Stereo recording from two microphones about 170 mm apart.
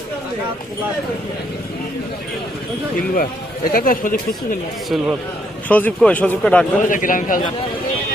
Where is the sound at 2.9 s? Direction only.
55° left (ahead or behind).